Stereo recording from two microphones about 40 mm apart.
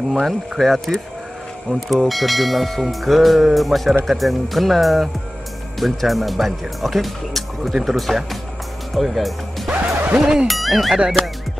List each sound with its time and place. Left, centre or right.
0.1 s church bell: centre
8.9 s speech: centre
10.1 s music: centre
10.4 s church bell: centre